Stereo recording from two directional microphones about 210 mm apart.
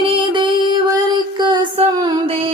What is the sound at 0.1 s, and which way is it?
Music, 25° right (ahead or behind).